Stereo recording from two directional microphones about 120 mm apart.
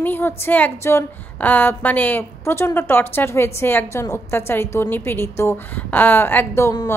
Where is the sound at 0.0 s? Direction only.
15° left (ahead or behind).